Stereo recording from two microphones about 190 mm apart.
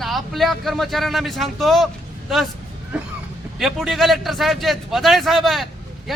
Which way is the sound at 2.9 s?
5° right (ahead or behind).